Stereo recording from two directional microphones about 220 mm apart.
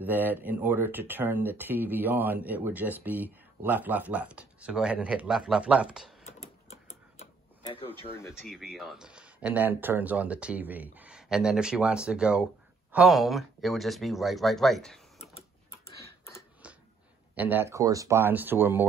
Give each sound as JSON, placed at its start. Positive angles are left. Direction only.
{"t": 0.0, "sound": "speech", "side_deg": -10}
{"t": 6.2, "sound": "typewriter", "side_deg": 30}
{"t": 7.6, "sound": "a sound", "side_deg": 25}
{"t": 8.1, "sound": "speech", "side_deg": 10}
{"t": 8.4, "sound": "speech", "side_deg": 0}
{"t": 15.2, "sound": "printer", "side_deg": 30}
{"t": 16.6, "sound": "a sound", "side_deg": -5}
{"t": 17.4, "sound": "speech", "side_deg": -10}